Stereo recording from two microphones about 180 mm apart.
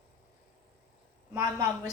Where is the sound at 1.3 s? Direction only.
20° right (ahead or behind).